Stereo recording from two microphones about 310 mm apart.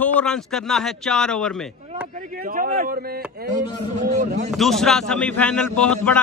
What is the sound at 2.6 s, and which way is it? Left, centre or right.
A man's voice, right.